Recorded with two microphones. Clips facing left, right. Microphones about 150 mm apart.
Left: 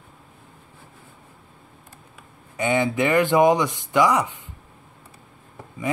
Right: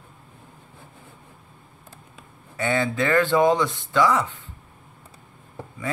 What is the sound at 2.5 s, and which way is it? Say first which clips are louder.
Speech: left 2 dB; 15° left (ahead or behind).